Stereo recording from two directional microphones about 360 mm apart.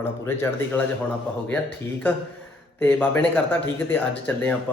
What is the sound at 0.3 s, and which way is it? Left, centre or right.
Speech, centre.